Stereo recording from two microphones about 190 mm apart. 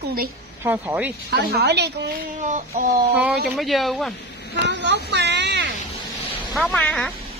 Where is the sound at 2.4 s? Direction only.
40° right (ahead or behind).